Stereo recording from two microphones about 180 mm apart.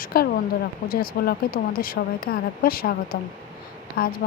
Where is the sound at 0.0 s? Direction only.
55° left (ahead or behind).